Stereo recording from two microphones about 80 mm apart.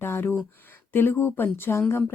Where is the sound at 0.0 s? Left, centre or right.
Left.